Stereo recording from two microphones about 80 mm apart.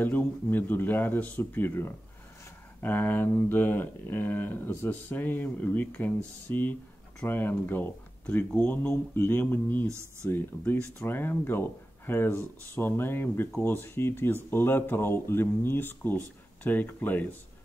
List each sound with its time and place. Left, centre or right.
0.0 s speech: left